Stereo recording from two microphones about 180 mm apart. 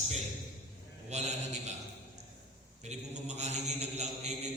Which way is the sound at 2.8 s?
40° right (ahead or behind).